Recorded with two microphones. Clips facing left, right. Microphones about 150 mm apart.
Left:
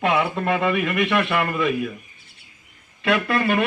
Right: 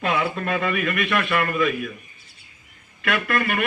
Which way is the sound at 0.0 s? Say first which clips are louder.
Left 3 dB; 20° left (ahead or behind).